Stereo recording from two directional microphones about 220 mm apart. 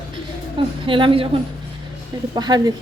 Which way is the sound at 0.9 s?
25° right (ahead or behind).